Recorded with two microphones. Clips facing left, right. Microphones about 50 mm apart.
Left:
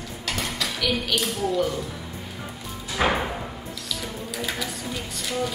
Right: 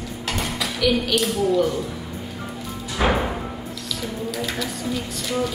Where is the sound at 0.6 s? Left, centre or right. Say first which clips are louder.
Right 7 dB; centre.